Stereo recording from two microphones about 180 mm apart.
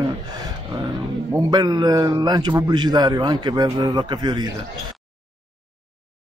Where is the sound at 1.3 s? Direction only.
20° right (ahead or behind).